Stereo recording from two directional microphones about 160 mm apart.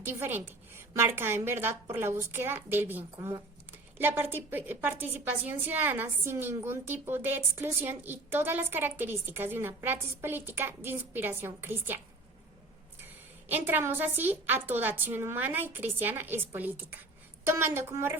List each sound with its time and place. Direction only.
0.0 s a woman's voice: 15° right (ahead or behind)
13.5 s a woman's voice: 10° right (ahead or behind)